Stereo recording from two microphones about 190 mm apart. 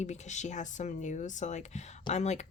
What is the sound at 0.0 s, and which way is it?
Speech, 35° left (ahead or behind).